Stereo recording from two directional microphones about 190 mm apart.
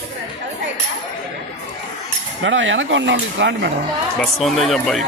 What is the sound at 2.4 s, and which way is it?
Speech, 80° right.